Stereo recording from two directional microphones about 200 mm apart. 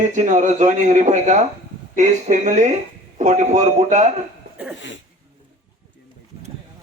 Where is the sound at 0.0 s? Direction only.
40° right (ahead or behind).